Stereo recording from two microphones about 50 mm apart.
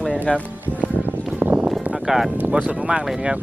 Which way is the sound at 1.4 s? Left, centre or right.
Right.